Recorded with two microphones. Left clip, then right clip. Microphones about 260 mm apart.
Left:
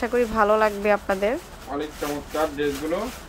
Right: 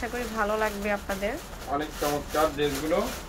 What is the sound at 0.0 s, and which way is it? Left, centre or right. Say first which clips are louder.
Speech: left 8 dB; left.